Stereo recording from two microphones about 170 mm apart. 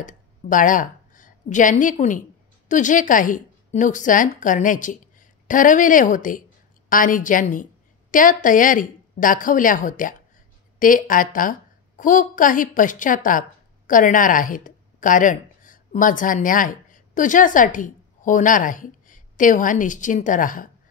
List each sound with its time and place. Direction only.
0.0 s a woman's voice: 50° left (ahead or behind)